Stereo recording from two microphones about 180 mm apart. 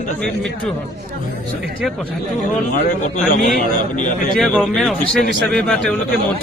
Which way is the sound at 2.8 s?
45° left (ahead or behind).